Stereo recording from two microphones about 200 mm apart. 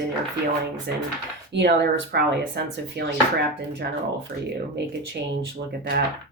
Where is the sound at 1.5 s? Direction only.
60° right (ahead or behind).